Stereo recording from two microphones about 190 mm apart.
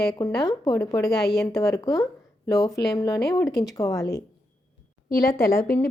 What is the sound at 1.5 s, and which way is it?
Speech, 20° left (ahead or behind).